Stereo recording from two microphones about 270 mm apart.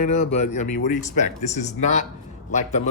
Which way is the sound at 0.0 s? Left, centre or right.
Left.